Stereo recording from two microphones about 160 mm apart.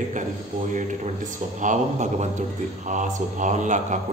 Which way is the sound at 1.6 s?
50° right (ahead or behind).